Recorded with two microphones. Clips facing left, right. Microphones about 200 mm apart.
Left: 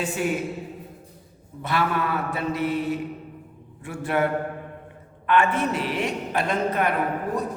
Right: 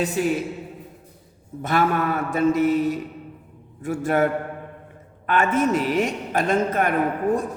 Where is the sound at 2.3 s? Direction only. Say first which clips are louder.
Right 10 dB; 45° right (ahead or behind).